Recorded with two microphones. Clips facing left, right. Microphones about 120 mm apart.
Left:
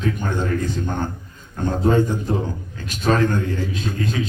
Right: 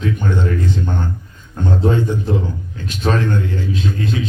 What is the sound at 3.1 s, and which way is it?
Speech, 40° left (ahead or behind).